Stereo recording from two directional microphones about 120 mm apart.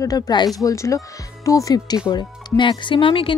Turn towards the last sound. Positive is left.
turn(degrees=45)  # may be behind; listen again after turning